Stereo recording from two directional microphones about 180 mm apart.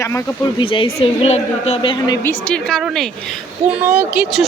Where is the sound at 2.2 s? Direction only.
5° left (ahead or behind).